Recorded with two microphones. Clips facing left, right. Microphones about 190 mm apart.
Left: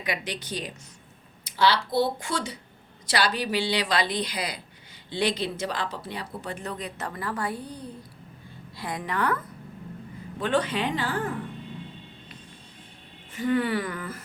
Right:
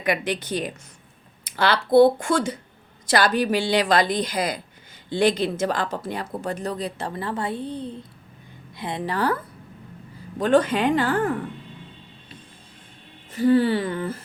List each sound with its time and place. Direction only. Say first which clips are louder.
0.0 s a woman's voice: right 7 dB; 55° right (ahead or behind); by 9.4 s 30° right (ahead or behind)
10.3 s a woman's voice: right 7 dB; 45° right (ahead or behind)
13.3 s speech: right 7 dB; 35° right (ahead or behind)